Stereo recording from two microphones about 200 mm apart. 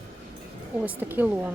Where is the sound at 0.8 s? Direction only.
10° right (ahead or behind).